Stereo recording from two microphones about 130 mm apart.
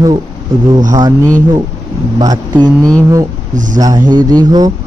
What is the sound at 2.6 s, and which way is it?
Speech, 25° right (ahead or behind).